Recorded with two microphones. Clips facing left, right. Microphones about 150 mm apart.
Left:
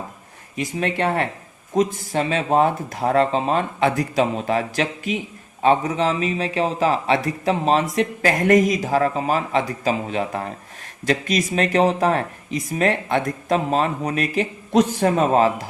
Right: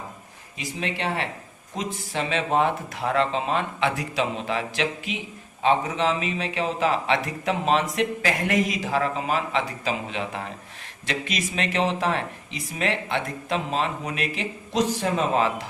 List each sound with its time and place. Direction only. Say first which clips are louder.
0.5 s a man's voice: left 7 dB; 50° left (ahead or behind)